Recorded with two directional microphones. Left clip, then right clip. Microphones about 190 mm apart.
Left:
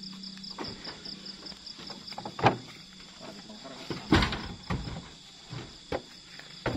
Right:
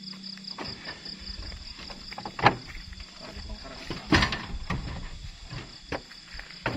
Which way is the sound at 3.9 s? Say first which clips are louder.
Right 2 dB; 30° right (ahead or behind).